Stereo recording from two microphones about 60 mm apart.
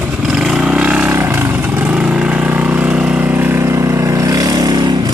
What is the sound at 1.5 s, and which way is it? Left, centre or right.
Vehicle, right.